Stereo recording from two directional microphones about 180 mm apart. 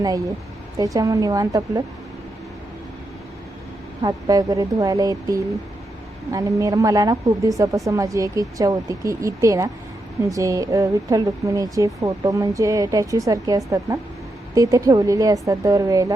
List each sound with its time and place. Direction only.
0.9 s a woman's voice: 20° right (ahead or behind)
4.0 s a woman's voice: 20° right (ahead or behind)